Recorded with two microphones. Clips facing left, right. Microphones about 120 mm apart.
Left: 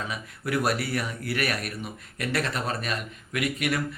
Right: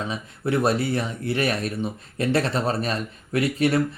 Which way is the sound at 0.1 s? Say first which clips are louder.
Right 4 dB; 25° right (ahead or behind).